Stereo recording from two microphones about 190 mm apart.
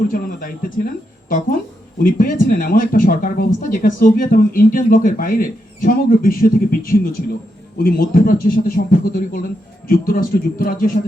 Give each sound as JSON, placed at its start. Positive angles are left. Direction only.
{"t": 0.1, "sound": "speech", "side_deg": 50}